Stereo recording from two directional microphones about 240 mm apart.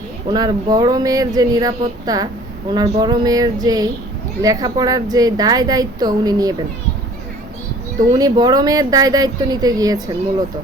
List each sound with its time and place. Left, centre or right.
0.3 s speech: centre
7.9 s speech: centre